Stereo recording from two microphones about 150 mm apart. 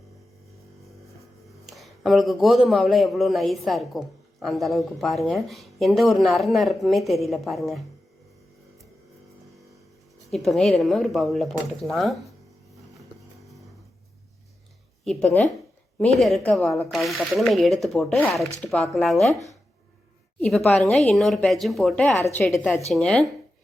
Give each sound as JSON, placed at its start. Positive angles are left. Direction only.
{"t": 1.6, "sound": "a man's voice", "side_deg": 0}
{"t": 10.3, "sound": "a man's voice", "side_deg": 0}
{"t": 15.0, "sound": "a man's voice", "side_deg": 5}
{"t": 20.4, "sound": "a man's voice", "side_deg": 5}
{"t": 22.9, "sound": "a man's voice", "side_deg": 0}